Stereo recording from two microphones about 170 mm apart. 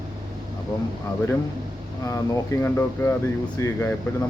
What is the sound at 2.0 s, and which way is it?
Speech, 15° left (ahead or behind).